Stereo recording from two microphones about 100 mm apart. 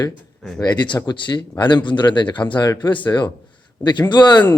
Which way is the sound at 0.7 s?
45° left (ahead or behind).